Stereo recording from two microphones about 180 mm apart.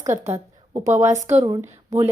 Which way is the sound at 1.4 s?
15° right (ahead or behind).